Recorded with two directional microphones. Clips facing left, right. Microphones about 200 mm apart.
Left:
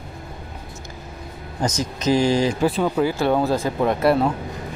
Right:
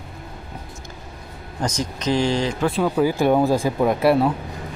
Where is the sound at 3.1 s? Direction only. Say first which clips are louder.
Right 2 dB; 15° right (ahead or behind).